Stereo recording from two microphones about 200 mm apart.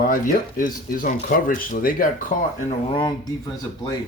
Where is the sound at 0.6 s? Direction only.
40° left (ahead or behind).